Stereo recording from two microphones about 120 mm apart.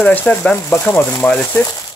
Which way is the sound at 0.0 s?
10° left (ahead or behind).